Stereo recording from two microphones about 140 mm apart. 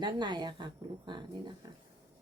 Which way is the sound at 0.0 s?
30° right (ahead or behind).